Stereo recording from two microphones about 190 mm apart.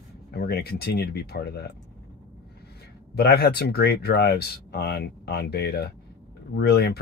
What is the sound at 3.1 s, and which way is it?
Speech, 55° left (ahead or behind).